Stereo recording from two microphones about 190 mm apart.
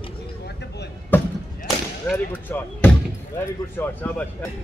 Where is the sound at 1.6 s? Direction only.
Centre (ahead or behind).